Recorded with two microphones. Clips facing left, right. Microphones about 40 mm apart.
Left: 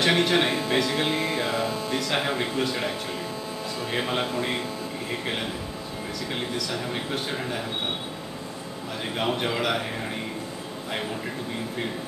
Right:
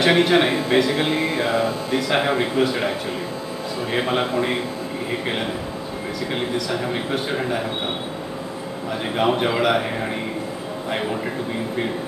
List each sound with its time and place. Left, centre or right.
0.0 s speech: centre
3.9 s speech: centre
9.1 s speech: centre
10.9 s speech: centre